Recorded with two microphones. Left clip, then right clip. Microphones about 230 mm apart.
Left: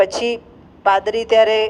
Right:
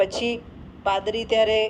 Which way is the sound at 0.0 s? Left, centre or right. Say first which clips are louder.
Left 6 dB; left.